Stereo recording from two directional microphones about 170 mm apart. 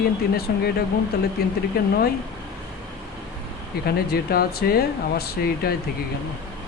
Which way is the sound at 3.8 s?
65° left (ahead or behind).